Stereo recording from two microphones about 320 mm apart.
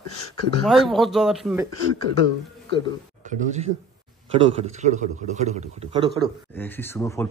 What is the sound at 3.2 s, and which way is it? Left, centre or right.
A man's voice, right.